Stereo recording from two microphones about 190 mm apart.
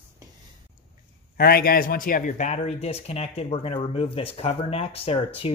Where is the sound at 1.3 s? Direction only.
55° left (ahead or behind).